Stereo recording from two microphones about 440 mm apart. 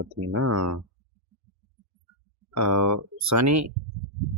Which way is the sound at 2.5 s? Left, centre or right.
Right.